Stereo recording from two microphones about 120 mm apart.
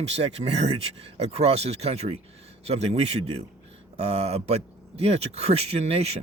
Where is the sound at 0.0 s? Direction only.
60° right (ahead or behind).